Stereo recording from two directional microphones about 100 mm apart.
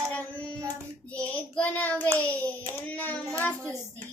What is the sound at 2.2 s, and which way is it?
Hands, 15° left (ahead or behind).